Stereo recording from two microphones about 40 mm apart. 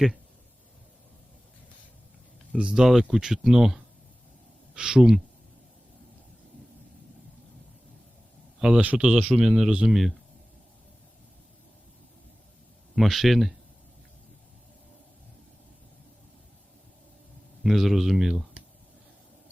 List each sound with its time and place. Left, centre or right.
2.5 s speech: right
2.7 s speech: centre
8.6 s speech: centre
13.0 s speech: centre
17.6 s speech: centre